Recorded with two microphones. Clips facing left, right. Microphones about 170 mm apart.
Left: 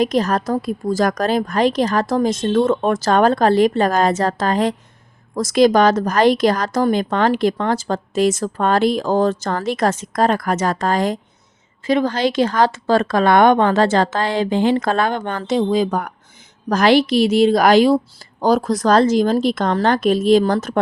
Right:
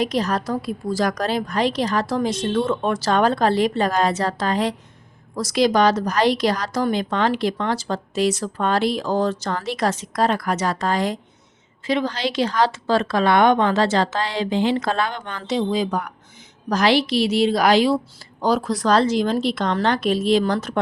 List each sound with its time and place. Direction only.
0.0 s a woman's voice: 45° left (ahead or behind)